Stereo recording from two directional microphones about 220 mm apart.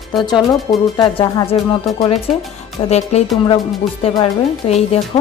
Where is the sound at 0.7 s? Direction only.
20° left (ahead or behind).